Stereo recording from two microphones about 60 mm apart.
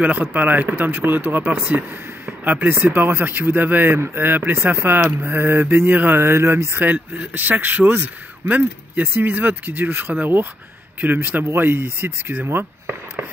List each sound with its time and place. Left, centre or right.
0.0 s speech: right
6.1 s speech: right
6.8 s speech: right